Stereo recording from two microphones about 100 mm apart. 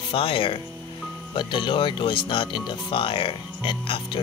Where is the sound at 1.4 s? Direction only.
55° left (ahead or behind).